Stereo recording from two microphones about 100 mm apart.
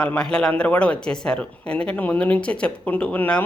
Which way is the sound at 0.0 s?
10° left (ahead or behind).